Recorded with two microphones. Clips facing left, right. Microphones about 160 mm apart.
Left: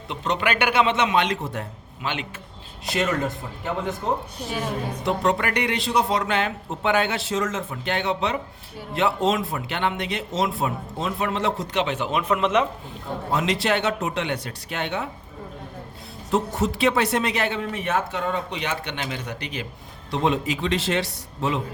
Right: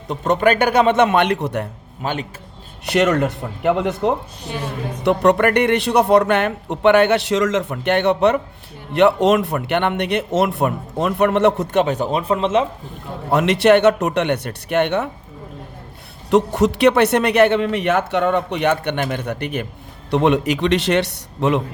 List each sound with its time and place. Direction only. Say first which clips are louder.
0.1 s a man's voice: right 8 dB; 45° right (ahead or behind); by 1.6 s 70° right (ahead or behind)
2.0 s a man's voice: right 5 dB; 40° right (ahead or behind)
2.8 s speech: right 8 dB; 70° right (ahead or behind)
5.0 s speech: right 9 dB; 65° right (ahead or behind); by 12.6 s 30° right (ahead or behind)
13.3 s speech: right 10 dB; 65° right (ahead or behind)
16.3 s speech: right 8 dB; 75° right (ahead or behind)